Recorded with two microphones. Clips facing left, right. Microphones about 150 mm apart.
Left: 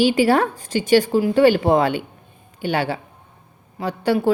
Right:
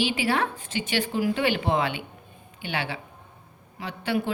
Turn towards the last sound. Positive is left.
turn(degrees=40)  # may be behind; listen again after turning